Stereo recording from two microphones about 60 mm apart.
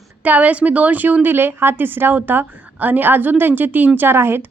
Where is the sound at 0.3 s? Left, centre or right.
Right.